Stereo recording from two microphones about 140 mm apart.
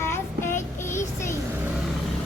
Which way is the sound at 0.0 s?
20° left (ahead or behind).